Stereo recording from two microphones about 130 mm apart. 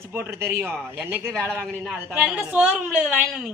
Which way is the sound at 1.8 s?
5° right (ahead or behind).